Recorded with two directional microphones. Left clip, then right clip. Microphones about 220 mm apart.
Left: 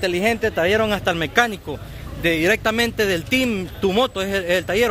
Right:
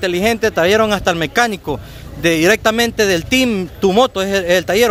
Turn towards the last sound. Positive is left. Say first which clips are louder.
# right 6 dB
turn(degrees=-20)  # may be behind; listen again after turning